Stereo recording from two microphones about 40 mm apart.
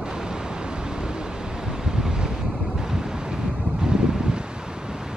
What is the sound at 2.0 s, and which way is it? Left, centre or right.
Wind noise, centre.